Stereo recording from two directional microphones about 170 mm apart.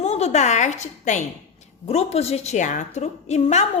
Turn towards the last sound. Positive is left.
turn(degrees=40)  # may be behind; listen again after turning